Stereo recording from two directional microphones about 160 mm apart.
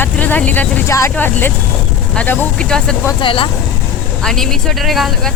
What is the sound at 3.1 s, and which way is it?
Speech, 30° left (ahead or behind).